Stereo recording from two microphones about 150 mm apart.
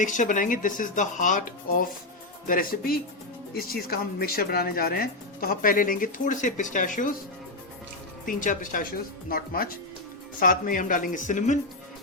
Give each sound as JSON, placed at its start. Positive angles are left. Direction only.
{"t": 0.0, "sound": "speech", "side_deg": 60}
{"t": 8.2, "sound": "speech", "side_deg": 60}
{"t": 10.4, "sound": "speech", "side_deg": 65}